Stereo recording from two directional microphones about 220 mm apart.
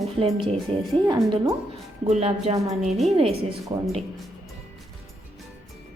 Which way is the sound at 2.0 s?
30° right (ahead or behind).